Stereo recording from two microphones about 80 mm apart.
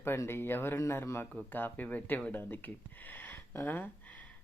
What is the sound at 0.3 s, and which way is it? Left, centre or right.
Speech, left.